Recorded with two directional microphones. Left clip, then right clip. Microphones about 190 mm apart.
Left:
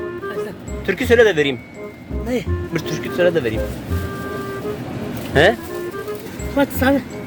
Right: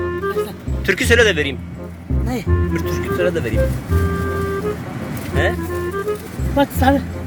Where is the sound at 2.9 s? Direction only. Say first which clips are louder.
Left 3 dB; 10° left (ahead or behind).